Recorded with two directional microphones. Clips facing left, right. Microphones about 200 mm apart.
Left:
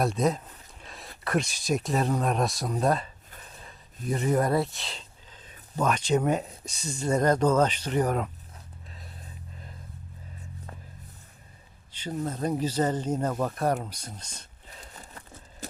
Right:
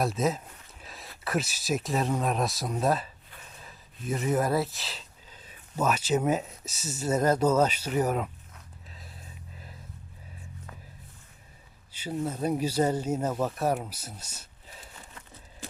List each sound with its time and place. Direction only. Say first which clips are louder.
0.0 s speech: left 2 dB; centre (ahead or behind)
11.9 s speech: even; 10° right (ahead or behind)
14.9 s a sound: left 2 dB; 40° left (ahead or behind)